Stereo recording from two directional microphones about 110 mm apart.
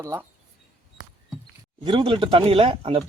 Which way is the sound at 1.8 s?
50° right (ahead or behind).